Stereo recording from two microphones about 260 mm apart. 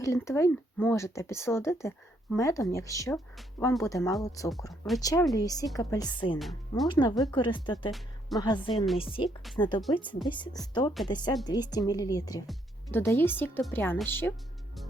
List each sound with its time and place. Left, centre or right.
0.0 s speech: centre
6.4 s speech: centre
6.8 s speech: centre